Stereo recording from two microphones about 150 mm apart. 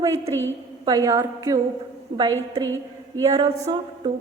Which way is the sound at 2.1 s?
30° right (ahead or behind).